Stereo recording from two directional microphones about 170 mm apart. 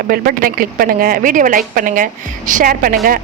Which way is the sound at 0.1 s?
60° right (ahead or behind).